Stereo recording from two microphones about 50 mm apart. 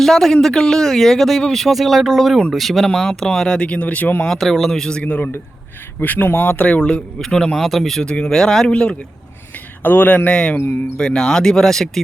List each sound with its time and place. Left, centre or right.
0.0 s speech: centre; by 4.1 s left
4.3 s speech: centre; by 5.3 s left
6.0 s speech: left; by 8.0 s centre
8.0 s speech: centre
9.8 s speech: left
10.2 s speech: centre